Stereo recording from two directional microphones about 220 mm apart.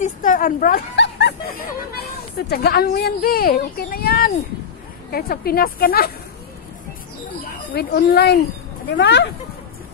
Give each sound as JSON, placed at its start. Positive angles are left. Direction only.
{"t": 0.0, "sound": "a sound", "side_deg": 40}
{"t": 2.3, "sound": "a child's voice", "side_deg": 45}
{"t": 7.7, "sound": "a child's voice", "side_deg": 45}